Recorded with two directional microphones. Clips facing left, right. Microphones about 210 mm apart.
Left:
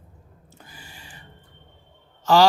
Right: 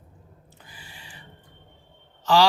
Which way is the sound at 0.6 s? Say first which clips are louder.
Left 2 dB; 45° left (ahead or behind).